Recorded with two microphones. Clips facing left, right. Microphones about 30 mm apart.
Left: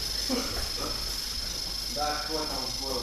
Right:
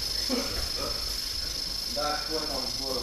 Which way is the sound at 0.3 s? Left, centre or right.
Centre.